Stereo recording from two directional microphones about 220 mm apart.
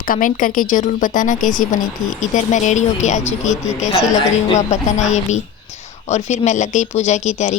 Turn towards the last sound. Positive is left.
turn(degrees=30)  # may be behind; listen again after turning